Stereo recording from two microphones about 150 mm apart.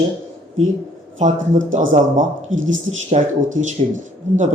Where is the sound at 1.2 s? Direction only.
55° right (ahead or behind).